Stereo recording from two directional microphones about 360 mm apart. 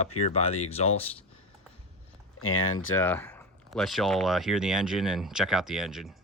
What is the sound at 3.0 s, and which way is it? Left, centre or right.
Speech, centre.